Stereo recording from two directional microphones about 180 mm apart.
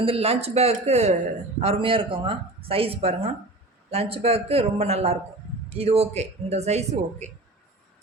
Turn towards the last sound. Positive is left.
turn(degrees=-40)  # may be behind; listen again after turning